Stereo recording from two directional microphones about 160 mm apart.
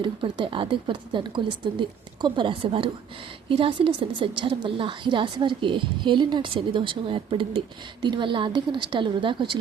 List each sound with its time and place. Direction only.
0.0 s a woman's voice: 30° right (ahead or behind)